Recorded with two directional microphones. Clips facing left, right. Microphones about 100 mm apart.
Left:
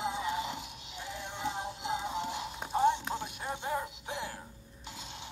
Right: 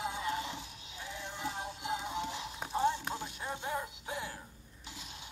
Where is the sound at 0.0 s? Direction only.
20° left (ahead or behind).